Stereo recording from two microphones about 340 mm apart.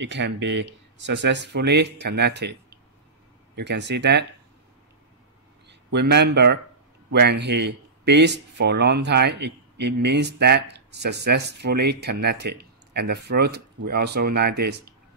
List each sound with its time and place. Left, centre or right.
0.0 s speech: right
5.7 s speech: right